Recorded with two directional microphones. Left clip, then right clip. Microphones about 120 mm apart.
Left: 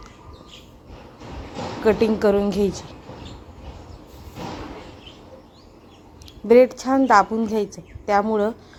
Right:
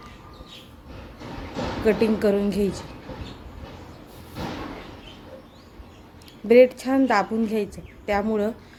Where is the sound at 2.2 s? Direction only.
5° left (ahead or behind).